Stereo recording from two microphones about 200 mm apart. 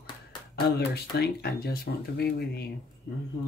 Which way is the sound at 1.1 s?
55° left (ahead or behind).